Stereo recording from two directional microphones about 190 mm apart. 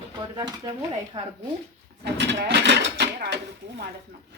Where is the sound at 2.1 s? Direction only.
65° right (ahead or behind).